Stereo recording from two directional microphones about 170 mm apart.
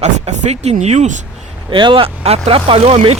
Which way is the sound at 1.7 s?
30° right (ahead or behind).